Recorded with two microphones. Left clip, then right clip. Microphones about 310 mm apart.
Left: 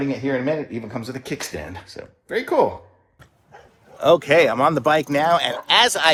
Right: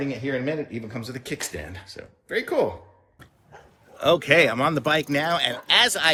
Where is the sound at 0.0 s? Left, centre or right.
Centre.